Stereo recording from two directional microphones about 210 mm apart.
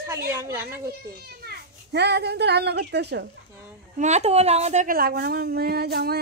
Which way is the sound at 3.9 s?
35° right (ahead or behind).